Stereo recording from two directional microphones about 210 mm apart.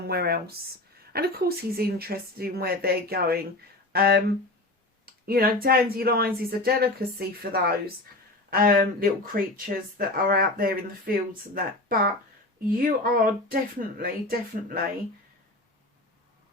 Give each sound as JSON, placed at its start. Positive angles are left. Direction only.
{"t": 0.1, "sound": "speech", "side_deg": -50}